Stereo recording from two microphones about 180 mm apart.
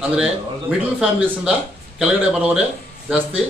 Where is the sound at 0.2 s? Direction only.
5° right (ahead or behind).